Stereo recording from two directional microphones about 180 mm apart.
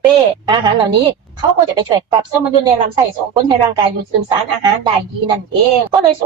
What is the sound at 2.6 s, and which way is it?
Speech, 25° right (ahead or behind).